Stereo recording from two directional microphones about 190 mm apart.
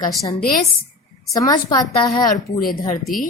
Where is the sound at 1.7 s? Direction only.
20° left (ahead or behind).